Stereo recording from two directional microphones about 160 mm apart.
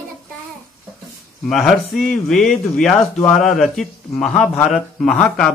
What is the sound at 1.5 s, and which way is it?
Speech, centre (ahead or behind).